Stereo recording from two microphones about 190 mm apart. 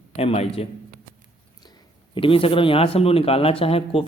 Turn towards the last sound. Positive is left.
turn(degrees=30)  # may be behind; listen again after turning